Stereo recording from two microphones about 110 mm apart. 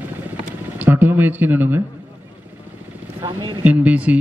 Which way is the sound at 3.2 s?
45° right (ahead or behind).